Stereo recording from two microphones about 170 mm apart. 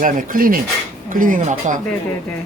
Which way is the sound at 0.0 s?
55° right (ahead or behind).